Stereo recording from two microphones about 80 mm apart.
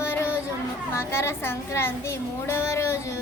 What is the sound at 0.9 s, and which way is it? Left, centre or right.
A child's voice, left.